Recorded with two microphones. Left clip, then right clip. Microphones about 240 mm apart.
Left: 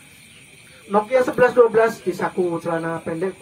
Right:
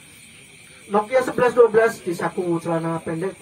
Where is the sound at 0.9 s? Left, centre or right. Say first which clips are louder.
Left 2 dB; left.